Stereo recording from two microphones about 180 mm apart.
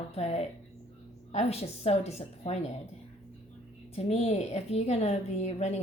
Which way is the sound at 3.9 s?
35° left (ahead or behind).